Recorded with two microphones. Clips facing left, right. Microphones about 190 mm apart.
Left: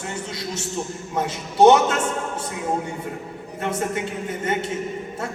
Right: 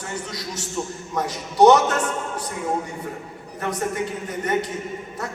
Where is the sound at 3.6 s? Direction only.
25° left (ahead or behind).